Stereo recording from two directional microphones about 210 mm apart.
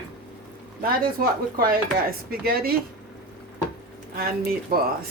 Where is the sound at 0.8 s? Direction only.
45° right (ahead or behind).